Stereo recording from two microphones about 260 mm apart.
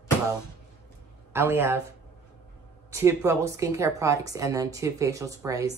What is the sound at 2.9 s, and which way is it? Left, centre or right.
A woman's voice, centre.